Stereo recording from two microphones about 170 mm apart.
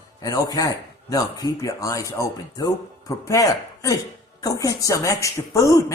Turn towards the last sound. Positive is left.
turn(degrees=20)  # may be behind; listen again after turning